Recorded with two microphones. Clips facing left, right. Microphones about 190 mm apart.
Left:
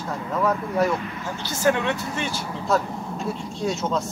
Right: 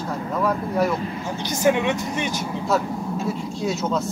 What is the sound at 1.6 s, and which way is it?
Speech, 15° right (ahead or behind).